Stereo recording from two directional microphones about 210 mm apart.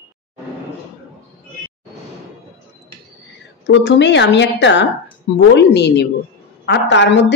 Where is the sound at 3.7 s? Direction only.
55° left (ahead or behind).